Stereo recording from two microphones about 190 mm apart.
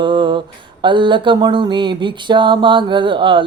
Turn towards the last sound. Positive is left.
turn(degrees=-25)  # may be behind; listen again after turning